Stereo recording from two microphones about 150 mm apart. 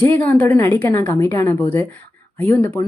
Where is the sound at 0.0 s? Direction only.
10° left (ahead or behind).